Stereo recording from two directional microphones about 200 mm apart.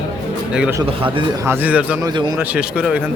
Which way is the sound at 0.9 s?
25° right (ahead or behind).